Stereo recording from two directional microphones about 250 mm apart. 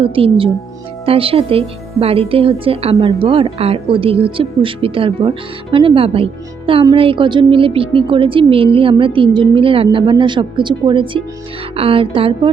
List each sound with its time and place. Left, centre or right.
0.0 s speech: right